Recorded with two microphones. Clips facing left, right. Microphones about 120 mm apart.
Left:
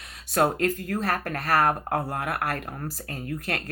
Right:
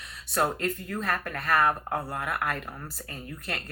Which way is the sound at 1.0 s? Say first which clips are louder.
Left 1 dB; 65° left (ahead or behind).